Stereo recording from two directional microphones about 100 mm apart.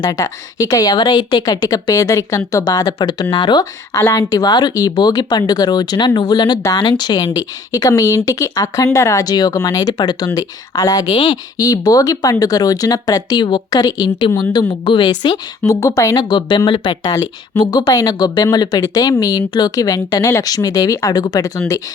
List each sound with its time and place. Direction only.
0.0 s speech: 35° left (ahead or behind)
11.1 s speech: 60° left (ahead or behind)
11.5 s speech: 40° left (ahead or behind)
15.6 s speech: 30° left (ahead or behind)
16.3 s speech: 50° left (ahead or behind)
17.6 s speech: 45° left (ahead or behind)